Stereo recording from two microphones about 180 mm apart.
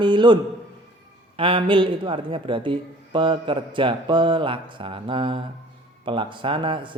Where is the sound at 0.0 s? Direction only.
25° right (ahead or behind).